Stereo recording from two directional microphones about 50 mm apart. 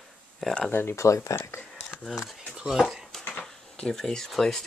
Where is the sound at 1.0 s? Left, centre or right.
Left.